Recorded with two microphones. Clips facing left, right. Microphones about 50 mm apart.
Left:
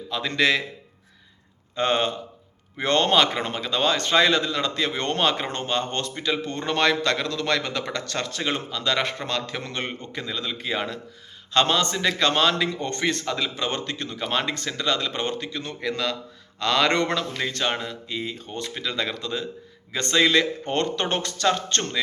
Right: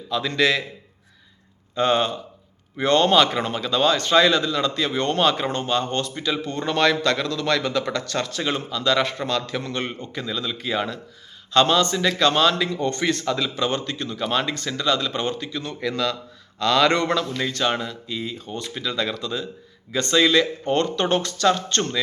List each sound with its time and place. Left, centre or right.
0.1 s a man's voice: left
1.7 s a man's voice: left
13.2 s a man's voice: centre
13.6 s a man's voice: left
17.3 s a man's voice: centre
18.1 s a man's voice: left